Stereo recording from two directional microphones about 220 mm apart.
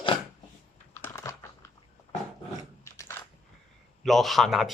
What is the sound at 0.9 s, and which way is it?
Typing, 10° left (ahead or behind).